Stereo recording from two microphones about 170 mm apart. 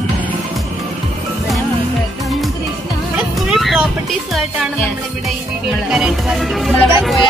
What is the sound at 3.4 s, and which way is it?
Vehicle, centre (ahead or behind).